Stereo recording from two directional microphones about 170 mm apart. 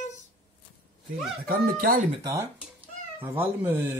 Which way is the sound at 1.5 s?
55° right (ahead or behind).